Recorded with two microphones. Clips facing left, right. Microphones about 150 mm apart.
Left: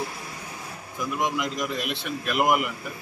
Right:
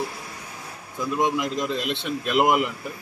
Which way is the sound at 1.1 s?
25° right (ahead or behind).